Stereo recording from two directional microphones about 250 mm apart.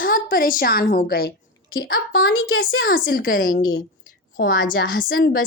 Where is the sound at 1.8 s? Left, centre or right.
Left.